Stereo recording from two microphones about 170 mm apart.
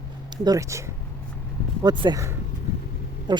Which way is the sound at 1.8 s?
25° right (ahead or behind).